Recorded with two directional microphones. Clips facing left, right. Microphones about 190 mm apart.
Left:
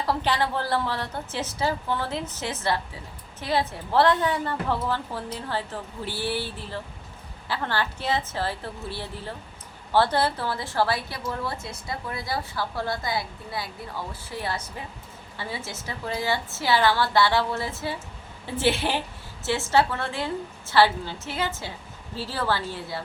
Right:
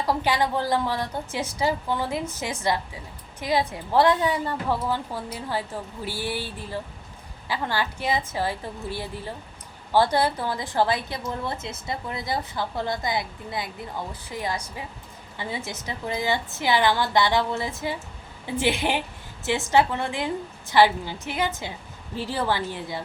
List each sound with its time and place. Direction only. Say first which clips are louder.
0.0 s a woman's voice: right 1 dB; 10° right (ahead or behind)